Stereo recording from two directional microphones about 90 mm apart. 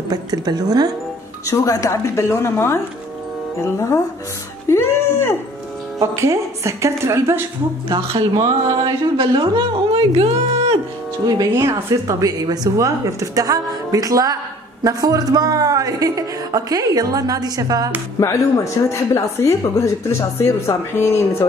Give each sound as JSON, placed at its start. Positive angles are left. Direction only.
{"t": 0.1, "sound": "speech", "side_deg": -45}
{"t": 1.5, "sound": "speech", "side_deg": 40}
{"t": 4.6, "sound": "a woman's voice", "side_deg": 30}
{"t": 5.9, "sound": "speech", "side_deg": -35}
{"t": 8.2, "sound": "speech", "side_deg": -50}
{"t": 11.5, "sound": "speech", "side_deg": -35}
{"t": 18.2, "sound": "a woman's voice", "side_deg": 30}